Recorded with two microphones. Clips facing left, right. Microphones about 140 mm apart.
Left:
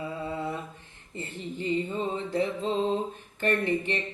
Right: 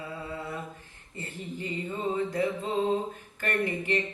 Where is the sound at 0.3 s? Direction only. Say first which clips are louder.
Left 4 dB; 25° left (ahead or behind).